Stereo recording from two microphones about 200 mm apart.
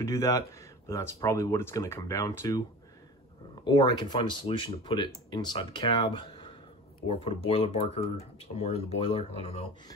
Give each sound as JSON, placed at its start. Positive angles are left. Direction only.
{"t": 0.0, "sound": "speech", "side_deg": 15}
{"t": 3.6, "sound": "speech", "side_deg": 20}